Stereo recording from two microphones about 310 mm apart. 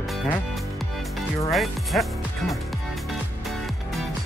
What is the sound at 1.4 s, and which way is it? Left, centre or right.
Speech, centre.